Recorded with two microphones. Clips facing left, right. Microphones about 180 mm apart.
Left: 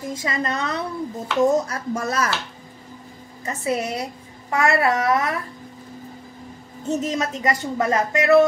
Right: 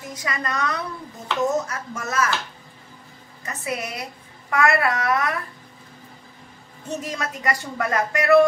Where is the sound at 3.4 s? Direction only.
30° left (ahead or behind).